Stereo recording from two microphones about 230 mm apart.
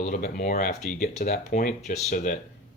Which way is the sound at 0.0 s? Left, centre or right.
Left.